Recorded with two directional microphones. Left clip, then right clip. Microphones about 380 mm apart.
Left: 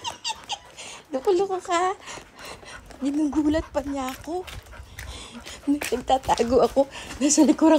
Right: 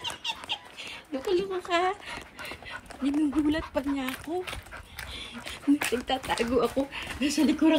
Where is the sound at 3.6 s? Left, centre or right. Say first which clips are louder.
Left 3 dB; centre.